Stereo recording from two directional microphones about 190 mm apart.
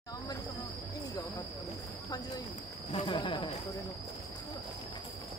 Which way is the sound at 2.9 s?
25° left (ahead or behind).